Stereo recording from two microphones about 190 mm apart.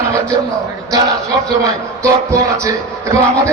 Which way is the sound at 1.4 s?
15° right (ahead or behind).